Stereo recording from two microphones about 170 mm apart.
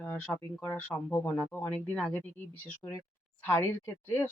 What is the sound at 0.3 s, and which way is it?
Speech, 10° left (ahead or behind).